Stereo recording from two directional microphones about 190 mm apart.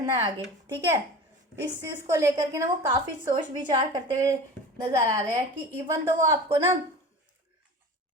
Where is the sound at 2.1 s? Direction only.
15° right (ahead or behind).